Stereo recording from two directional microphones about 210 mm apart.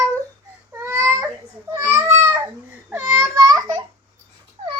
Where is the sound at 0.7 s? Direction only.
10° right (ahead or behind).